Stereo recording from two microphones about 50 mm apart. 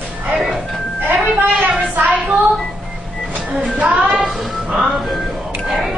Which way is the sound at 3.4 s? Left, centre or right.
Centre.